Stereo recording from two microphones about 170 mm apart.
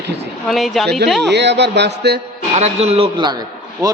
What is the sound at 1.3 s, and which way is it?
Speech, 90° right.